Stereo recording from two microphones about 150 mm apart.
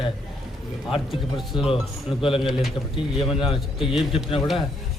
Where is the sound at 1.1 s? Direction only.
Centre (ahead or behind).